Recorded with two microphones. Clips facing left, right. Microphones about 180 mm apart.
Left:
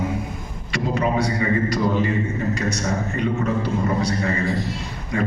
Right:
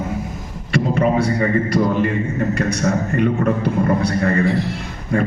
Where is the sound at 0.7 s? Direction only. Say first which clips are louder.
Right 5 dB; 55° right (ahead or behind).